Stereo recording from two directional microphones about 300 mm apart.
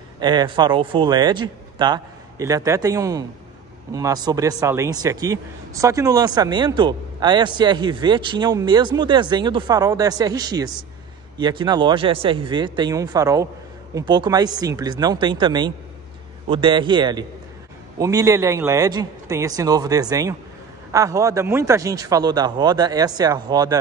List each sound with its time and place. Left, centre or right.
0.2 s a man's voice: centre